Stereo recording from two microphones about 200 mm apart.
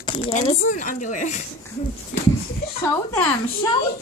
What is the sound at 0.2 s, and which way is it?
A woman's voice, 35° left (ahead or behind).